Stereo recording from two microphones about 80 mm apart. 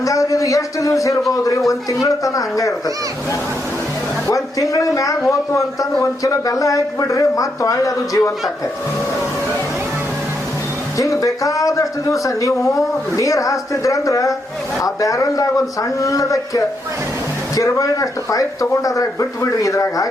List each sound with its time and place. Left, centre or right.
0.0 s speech: left
4.3 s speech: left
10.9 s speech: left